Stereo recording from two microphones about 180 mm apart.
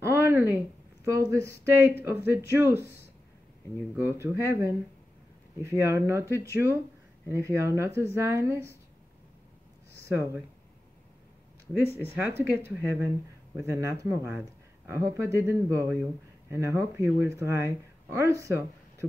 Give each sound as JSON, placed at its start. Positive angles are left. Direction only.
{"t": 0.0, "sound": "a sound", "side_deg": -15}
{"t": 1.0, "sound": "speech", "side_deg": -15}
{"t": 4.0, "sound": "speech", "side_deg": -15}
{"t": 9.9, "sound": "speech", "side_deg": -15}
{"t": 12.2, "sound": "speech", "side_deg": -10}